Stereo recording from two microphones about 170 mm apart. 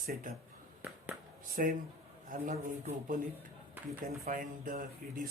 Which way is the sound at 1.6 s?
55° right (ahead or behind).